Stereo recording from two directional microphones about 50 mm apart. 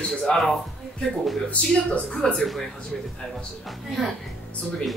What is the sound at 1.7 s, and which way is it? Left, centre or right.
Speech, centre.